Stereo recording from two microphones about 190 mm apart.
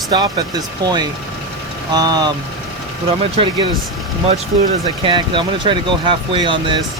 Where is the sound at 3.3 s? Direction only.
25° right (ahead or behind).